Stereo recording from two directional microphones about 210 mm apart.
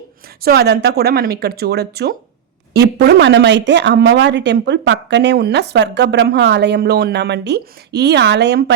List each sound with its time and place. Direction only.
0.4 s speech: 50° right (ahead or behind)